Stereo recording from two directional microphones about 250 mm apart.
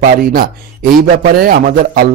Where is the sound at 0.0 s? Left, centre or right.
Right.